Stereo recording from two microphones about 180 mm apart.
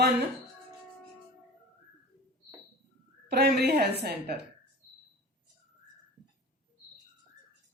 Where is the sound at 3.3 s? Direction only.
65° right (ahead or behind).